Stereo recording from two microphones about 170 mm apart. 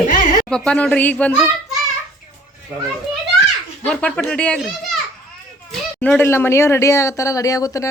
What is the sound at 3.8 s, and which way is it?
Speech, 5° left (ahead or behind).